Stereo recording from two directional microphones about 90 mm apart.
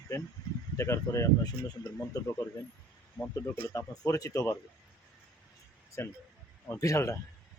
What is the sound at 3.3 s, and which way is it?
Speech, 35° left (ahead or behind).